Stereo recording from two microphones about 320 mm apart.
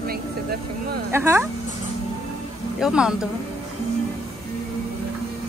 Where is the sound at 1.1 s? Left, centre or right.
Centre.